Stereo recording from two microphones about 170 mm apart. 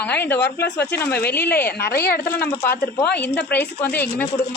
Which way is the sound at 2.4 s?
15° left (ahead or behind).